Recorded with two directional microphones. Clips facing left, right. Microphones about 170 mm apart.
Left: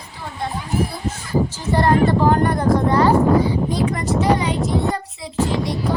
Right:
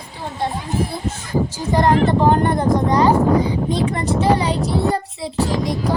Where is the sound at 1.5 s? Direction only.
15° right (ahead or behind).